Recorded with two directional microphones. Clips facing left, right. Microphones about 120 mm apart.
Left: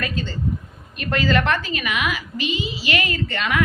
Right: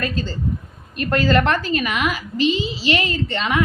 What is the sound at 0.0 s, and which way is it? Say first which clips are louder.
A woman's voice: right 2 dB; 35° right (ahead or behind).